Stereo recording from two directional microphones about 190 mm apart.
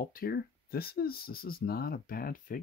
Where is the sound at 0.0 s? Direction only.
50° left (ahead or behind).